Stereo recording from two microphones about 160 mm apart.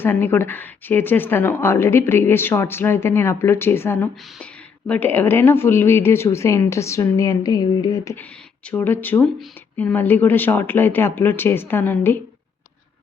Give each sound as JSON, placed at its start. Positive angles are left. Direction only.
{"t": 0.0, "sound": "speech", "side_deg": 15}